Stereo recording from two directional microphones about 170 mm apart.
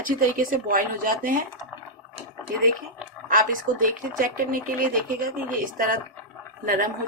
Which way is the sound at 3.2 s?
55° right (ahead or behind).